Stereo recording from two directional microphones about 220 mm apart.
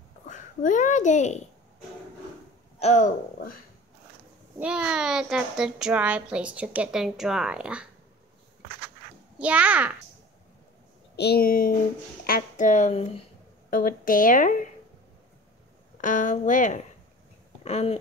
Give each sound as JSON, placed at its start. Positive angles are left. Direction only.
{"t": 0.3, "sound": "a child's voice", "side_deg": 35}
{"t": 2.8, "sound": "a woman's voice", "side_deg": 35}
{"t": 4.6, "sound": "a child's voice", "side_deg": -5}
{"t": 9.4, "sound": "a child's voice", "side_deg": -5}
{"t": 11.1, "sound": "a woman's voice", "side_deg": 45}
{"t": 16.0, "sound": "a woman's voice", "side_deg": 35}